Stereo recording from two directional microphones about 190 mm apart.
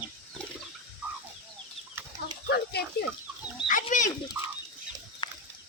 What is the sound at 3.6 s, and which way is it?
Chicken, 45° left (ahead or behind).